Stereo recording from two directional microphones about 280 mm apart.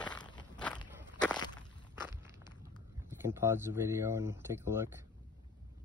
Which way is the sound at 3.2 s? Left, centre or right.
Centre.